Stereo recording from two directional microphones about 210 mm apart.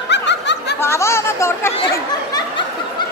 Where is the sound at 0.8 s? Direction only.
10° left (ahead or behind).